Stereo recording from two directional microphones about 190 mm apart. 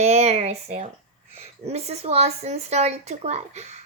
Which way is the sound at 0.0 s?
35° right (ahead or behind).